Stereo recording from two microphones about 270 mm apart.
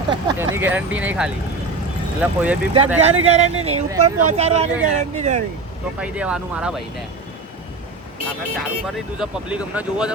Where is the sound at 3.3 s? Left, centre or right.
Right.